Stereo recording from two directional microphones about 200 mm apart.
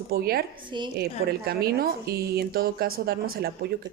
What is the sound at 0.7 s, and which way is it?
Speech, 25° right (ahead or behind).